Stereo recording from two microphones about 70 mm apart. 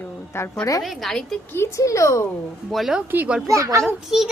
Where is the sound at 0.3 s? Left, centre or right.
Left.